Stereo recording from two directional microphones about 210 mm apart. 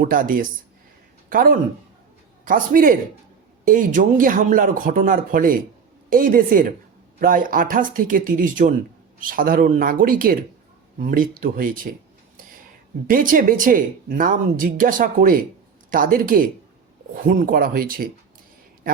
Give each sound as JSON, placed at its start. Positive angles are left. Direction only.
{"t": 0.0, "sound": "a man's voice", "side_deg": -40}
{"t": 13.1, "sound": "speech", "side_deg": -40}